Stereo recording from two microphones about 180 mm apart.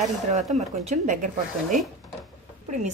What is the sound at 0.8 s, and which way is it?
Speech, 45° right (ahead or behind).